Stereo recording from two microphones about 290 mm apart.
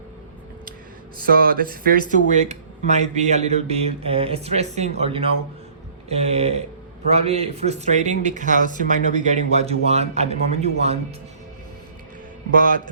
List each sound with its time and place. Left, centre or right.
1.2 s speech: right